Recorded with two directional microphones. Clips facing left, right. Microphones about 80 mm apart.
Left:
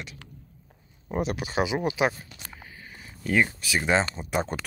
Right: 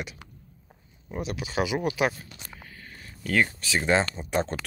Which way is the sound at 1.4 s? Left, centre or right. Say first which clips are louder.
Left 1 dB; left.